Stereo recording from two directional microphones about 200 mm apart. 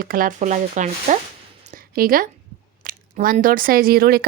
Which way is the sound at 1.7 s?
45° right (ahead or behind).